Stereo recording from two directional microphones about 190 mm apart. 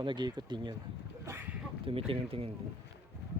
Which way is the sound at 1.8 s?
30° right (ahead or behind).